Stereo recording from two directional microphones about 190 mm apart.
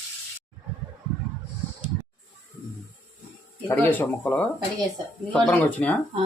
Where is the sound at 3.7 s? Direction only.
10° left (ahead or behind).